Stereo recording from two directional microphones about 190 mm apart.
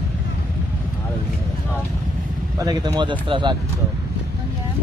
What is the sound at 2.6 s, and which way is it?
Speech, 20° right (ahead or behind).